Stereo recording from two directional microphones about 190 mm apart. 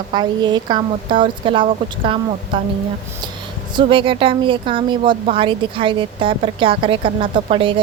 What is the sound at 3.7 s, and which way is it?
Speech, 25° right (ahead or behind).